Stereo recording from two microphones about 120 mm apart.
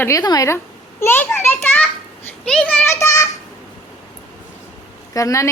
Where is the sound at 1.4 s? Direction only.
15° left (ahead or behind).